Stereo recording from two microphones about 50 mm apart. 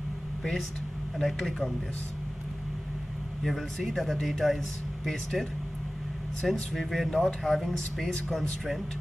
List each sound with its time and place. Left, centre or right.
0.4 s speech: centre
3.4 s speech: centre
6.7 s speech: centre